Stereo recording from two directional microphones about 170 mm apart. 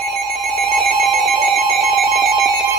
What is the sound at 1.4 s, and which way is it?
Alarm clock, centre (ahead or behind).